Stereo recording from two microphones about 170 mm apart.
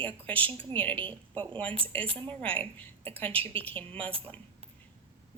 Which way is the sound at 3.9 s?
10° left (ahead or behind).